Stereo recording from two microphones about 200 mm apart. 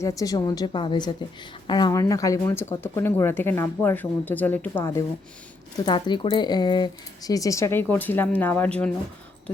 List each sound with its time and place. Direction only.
0.0 s a woman's voice: 15° left (ahead or behind)